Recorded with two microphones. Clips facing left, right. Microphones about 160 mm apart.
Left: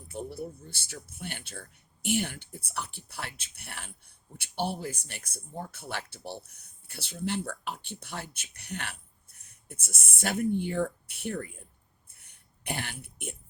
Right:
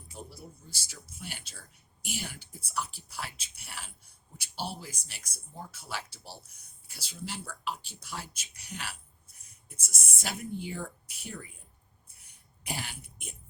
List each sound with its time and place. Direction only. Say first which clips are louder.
0.1 s speech: left 10 dB; 60° left (ahead or behind)